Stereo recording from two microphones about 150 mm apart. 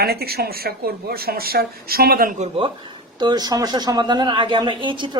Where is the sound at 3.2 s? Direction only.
25° right (ahead or behind).